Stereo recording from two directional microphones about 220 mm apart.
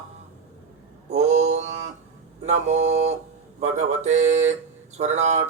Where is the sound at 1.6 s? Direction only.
30° right (ahead or behind).